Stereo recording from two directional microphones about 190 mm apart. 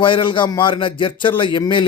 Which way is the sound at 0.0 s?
25° left (ahead or behind).